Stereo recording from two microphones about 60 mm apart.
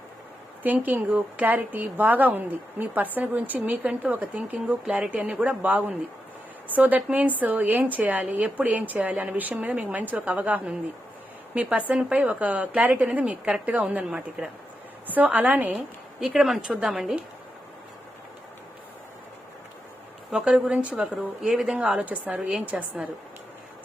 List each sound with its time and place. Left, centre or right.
0.6 s a woman's voice: right
15.0 s a woman's voice: right
16.2 s a woman's voice: centre
20.3 s a woman's voice: centre
22.4 s a woman's voice: centre
22.6 s a woman's voice: right